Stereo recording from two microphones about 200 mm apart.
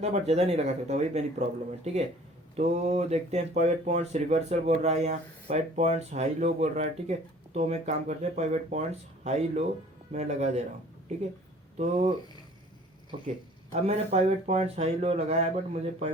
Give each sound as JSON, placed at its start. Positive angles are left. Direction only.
{"t": 0.0, "sound": "speech", "side_deg": -35}
{"t": 11.8, "sound": "speech", "side_deg": -35}
{"t": 13.7, "sound": "speech", "side_deg": -30}